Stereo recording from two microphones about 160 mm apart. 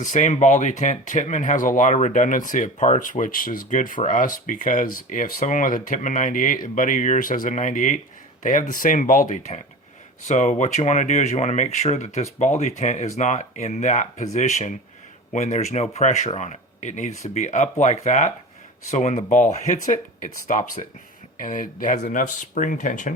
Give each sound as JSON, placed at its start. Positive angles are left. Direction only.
{"t": 0.0, "sound": "speech", "side_deg": 50}